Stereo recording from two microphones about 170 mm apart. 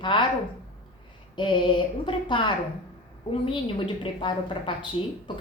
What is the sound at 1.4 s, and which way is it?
A woman's voice, 30° left (ahead or behind).